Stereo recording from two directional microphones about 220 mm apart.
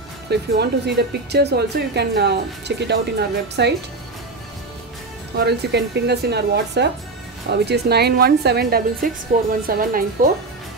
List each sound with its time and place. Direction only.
0.3 s speech: 50° right (ahead or behind)
5.4 s speech: 50° right (ahead or behind)